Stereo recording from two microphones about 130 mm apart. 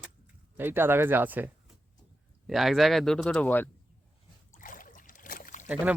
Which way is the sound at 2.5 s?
Centre (ahead or behind).